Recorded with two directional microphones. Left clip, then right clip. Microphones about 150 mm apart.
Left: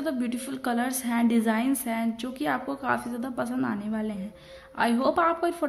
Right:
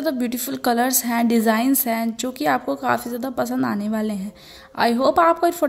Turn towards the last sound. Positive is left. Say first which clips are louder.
# right 8 dB
turn(degrees=-40)  # may be behind; listen again after turning